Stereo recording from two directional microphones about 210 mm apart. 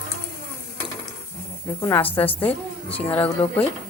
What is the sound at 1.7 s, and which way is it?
Speech, 10° left (ahead or behind).